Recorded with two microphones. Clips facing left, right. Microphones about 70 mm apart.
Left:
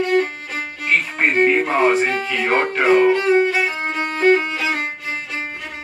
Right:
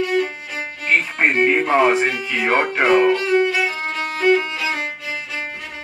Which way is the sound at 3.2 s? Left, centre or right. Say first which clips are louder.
Left 2 dB; left.